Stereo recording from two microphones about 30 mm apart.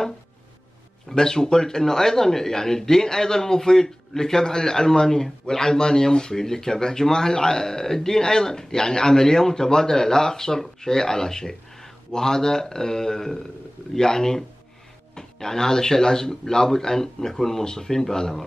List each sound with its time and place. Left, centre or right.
1.1 s speech: left